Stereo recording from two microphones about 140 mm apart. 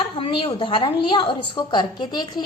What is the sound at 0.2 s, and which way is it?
A woman's voice, 40° left (ahead or behind).